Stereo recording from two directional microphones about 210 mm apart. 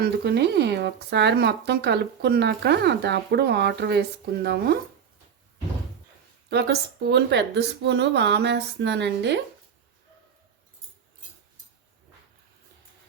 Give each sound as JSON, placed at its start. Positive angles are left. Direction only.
{"t": 0.0, "sound": "speech", "side_deg": -50}
{"t": 6.5, "sound": "speech", "side_deg": -50}